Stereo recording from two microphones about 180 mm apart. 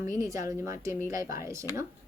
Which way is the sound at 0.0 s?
15° right (ahead or behind).